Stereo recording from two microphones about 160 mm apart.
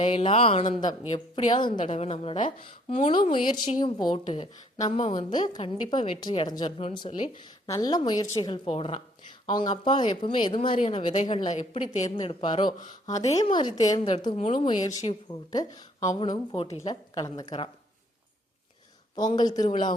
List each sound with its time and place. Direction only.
0.0 s a woman's voice: 35° left (ahead or behind)
1.8 s a woman's voice: 45° left (ahead or behind)
11.4 s a woman's voice: 45° left (ahead or behind)
12.1 s a woman's voice: 30° left (ahead or behind)
19.1 s a woman's voice: 25° left (ahead or behind)